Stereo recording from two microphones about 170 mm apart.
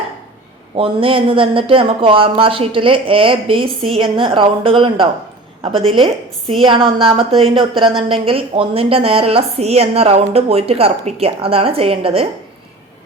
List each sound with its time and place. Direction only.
0.8 s a woman's voice: 30° right (ahead or behind)